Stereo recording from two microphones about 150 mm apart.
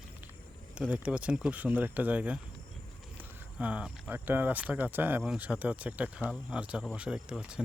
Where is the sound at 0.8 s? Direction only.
10° right (ahead or behind).